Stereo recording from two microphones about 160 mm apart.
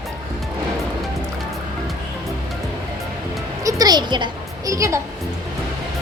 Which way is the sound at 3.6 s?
25° right (ahead or behind).